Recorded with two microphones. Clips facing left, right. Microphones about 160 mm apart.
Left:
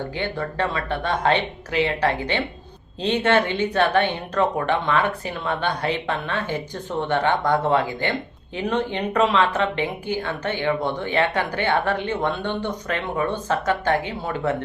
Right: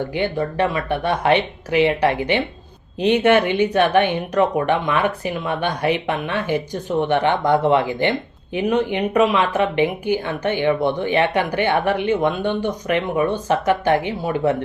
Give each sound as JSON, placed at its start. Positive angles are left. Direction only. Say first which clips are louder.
{"t": 0.1, "sound": "speech", "louder": "right 5 dB", "side_deg": -15}